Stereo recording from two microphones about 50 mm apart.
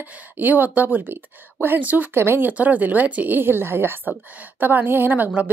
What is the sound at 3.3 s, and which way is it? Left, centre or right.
A woman's voice, right.